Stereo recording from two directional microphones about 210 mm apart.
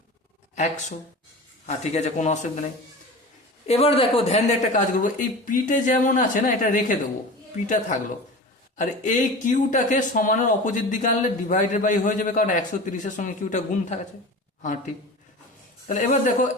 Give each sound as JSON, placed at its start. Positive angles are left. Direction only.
{"t": 0.5, "sound": "speech", "side_deg": 35}
{"t": 3.7, "sound": "speech", "side_deg": 25}
{"t": 15.9, "sound": "speech", "side_deg": 35}